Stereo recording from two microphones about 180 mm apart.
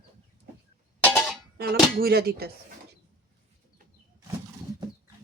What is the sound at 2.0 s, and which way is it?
Speech, 60° right (ahead or behind).